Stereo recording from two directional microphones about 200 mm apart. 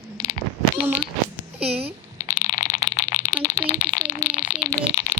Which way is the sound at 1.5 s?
30° right (ahead or behind).